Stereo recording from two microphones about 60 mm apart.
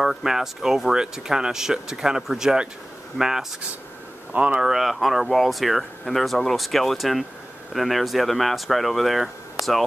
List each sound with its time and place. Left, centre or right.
0.0 s speech: centre
4.6 s speech: centre